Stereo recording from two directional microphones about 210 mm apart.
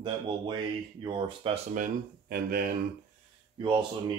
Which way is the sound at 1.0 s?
20° right (ahead or behind).